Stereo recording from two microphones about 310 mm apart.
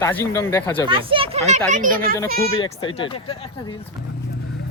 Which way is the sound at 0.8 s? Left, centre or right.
Centre.